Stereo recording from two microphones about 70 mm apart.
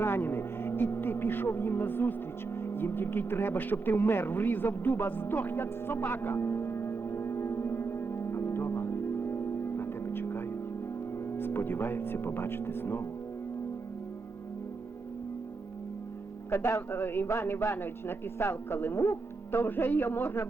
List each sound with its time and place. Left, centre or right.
0.0 s speech: left
2.6 s a sound: left
11.3 s speech: left
16.5 s speech: left